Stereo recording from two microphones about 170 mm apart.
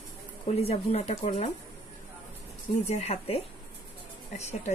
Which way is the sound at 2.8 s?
40° left (ahead or behind).